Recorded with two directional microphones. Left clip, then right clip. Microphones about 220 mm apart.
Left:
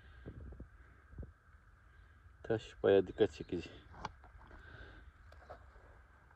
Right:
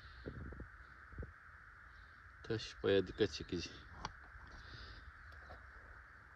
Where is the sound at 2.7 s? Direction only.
15° right (ahead or behind).